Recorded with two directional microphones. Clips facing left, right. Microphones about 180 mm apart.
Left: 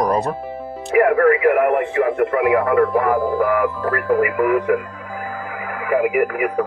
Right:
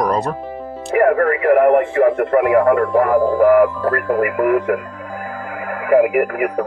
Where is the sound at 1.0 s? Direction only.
40° right (ahead or behind).